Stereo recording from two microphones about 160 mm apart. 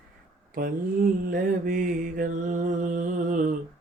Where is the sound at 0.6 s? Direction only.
60° right (ahead or behind).